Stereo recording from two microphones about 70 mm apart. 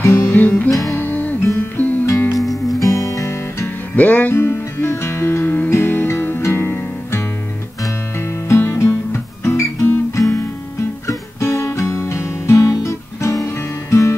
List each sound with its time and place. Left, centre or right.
0.0 s music: left
0.7 s music: left
0.9 s music: left
2.3 s music: centre
2.8 s guitar: left
3.6 s music: left
4.4 s music: left
12.7 s guitar: left